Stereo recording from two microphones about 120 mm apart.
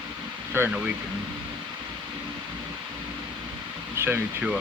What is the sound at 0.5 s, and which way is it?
Speech, 20° right (ahead or behind).